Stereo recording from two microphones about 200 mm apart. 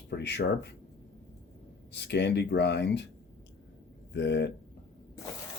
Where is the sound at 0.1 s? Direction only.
55° left (ahead or behind).